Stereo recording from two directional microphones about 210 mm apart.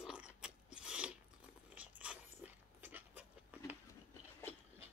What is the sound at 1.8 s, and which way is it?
Dog, 5° right (ahead or behind).